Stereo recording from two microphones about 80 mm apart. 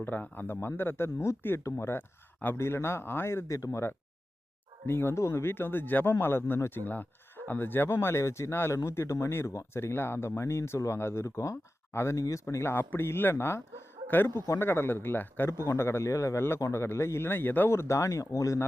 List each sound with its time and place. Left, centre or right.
0.0 s speech: left